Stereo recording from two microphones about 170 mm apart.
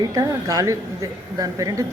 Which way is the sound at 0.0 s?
20° right (ahead or behind).